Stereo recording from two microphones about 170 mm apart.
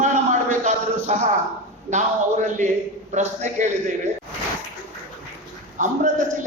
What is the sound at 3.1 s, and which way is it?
Speech, 45° right (ahead or behind).